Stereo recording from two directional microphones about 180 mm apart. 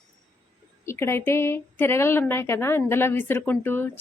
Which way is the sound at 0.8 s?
15° left (ahead or behind).